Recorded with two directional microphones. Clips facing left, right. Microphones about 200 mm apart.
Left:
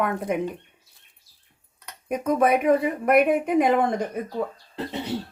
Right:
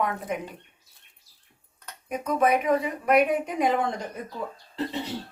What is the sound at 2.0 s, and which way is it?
Speech, 50° left (ahead or behind).